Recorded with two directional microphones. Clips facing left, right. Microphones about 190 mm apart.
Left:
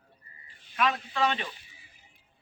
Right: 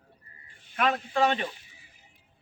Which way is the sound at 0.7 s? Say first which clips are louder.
Right 2 dB; 45° right (ahead or behind).